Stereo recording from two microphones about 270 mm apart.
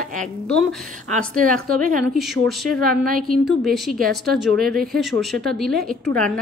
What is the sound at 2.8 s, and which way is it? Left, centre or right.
Speech, right.